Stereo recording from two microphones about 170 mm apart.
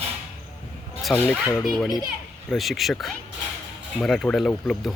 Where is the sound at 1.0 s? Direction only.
Centre (ahead or behind).